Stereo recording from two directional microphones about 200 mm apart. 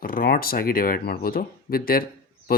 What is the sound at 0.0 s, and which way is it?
Speech, 50° left (ahead or behind).